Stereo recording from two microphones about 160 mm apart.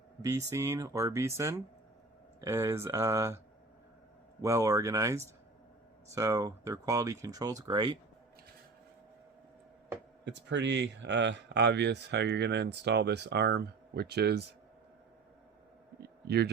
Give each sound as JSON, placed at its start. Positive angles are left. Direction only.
{"t": 0.2, "sound": "speech", "side_deg": -20}
{"t": 10.2, "sound": "speech", "side_deg": -90}
{"t": 16.0, "sound": "a sound", "side_deg": -90}